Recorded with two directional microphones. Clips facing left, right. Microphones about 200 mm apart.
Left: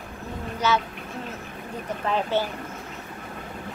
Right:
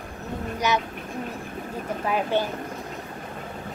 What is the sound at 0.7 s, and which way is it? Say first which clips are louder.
Speech: left 1 dB; 15° right (ahead or behind).